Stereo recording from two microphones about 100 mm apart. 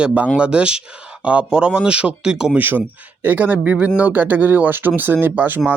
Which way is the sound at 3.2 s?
20° right (ahead or behind).